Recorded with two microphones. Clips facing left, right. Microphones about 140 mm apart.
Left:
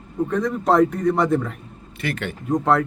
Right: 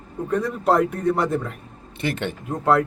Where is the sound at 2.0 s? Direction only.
25° right (ahead or behind).